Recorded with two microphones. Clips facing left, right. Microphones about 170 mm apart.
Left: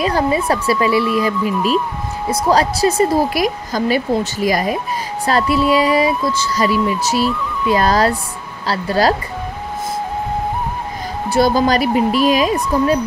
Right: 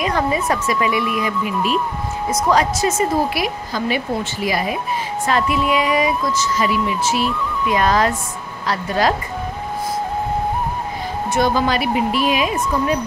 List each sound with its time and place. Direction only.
0.0 s speech: 30° left (ahead or behind)
2.3 s speech: 35° left (ahead or behind)
11.2 s speech: 35° left (ahead or behind)